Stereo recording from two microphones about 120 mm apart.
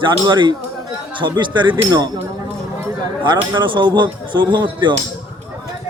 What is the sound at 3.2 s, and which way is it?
Speech, 40° right (ahead or behind).